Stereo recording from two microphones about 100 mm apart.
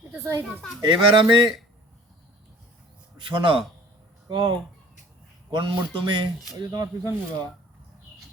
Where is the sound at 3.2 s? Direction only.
55° right (ahead or behind); by 7.1 s 40° right (ahead or behind).